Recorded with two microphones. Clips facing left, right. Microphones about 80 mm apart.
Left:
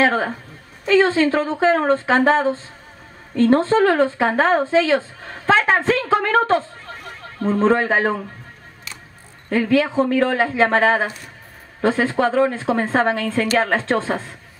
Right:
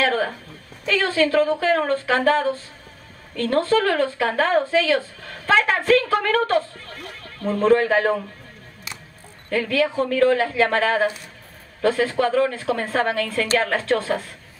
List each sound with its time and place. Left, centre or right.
0.0 s a woman's voice: left
9.5 s a woman's voice: left